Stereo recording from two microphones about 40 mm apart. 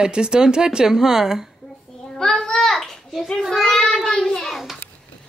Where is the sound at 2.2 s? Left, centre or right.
Centre.